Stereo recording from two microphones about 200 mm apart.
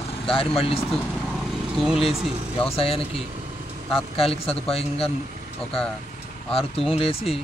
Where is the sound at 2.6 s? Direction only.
30° left (ahead or behind).